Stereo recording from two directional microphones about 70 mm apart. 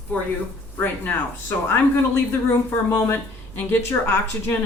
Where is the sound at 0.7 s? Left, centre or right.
Left.